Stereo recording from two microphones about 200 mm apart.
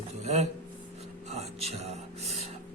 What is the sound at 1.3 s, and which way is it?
Music, 30° right (ahead or behind).